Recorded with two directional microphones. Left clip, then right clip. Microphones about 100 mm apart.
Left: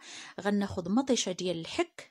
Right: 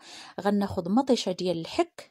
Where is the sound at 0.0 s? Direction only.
30° right (ahead or behind).